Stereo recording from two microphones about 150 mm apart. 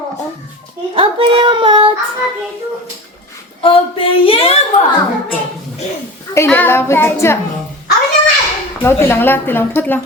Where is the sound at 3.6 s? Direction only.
35° left (ahead or behind).